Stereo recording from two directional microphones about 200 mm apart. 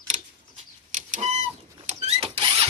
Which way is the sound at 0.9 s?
40° right (ahead or behind).